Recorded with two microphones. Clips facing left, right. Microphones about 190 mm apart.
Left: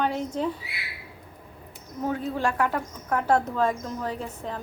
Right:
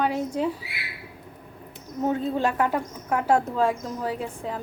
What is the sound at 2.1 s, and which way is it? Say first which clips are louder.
A woman's voice: right 3 dB; 25° right (ahead or behind).